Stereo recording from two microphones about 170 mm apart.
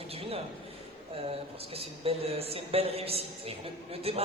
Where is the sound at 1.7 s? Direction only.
35° right (ahead or behind).